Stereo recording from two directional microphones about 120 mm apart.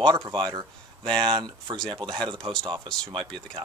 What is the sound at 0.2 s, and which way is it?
Speech, 45° right (ahead or behind).